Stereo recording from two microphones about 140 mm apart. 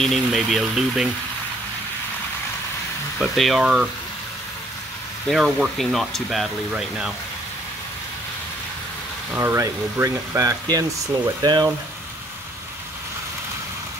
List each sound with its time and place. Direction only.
0.0 s speech: centre (ahead or behind)
3.2 s speech: centre (ahead or behind)
5.3 s speech: centre (ahead or behind)
9.3 s speech: 20° right (ahead or behind)